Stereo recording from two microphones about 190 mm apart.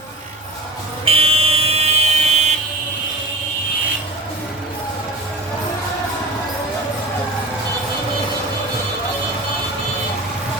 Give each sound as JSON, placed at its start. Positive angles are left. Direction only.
{"t": 1.0, "sound": "vehicle", "side_deg": -30}